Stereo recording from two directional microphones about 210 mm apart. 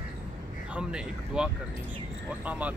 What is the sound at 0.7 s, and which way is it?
Speech, 5° right (ahead or behind).